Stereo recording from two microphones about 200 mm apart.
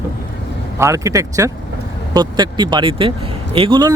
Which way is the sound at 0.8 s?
15° right (ahead or behind).